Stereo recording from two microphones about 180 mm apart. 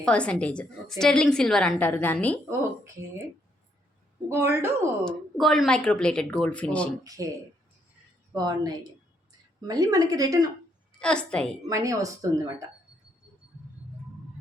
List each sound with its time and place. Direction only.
0.0 s a woman's voice: 5° left (ahead or behind)
4.3 s speech: 15° right (ahead or behind)
5.0 s a woman's voice: centre (ahead or behind)
7.0 s a woman's voice: 20° right (ahead or behind)
8.3 s a woman's voice: 20° right (ahead or behind)
11.0 s a woman's voice: 5° left (ahead or behind)
11.7 s speech: 20° right (ahead or behind)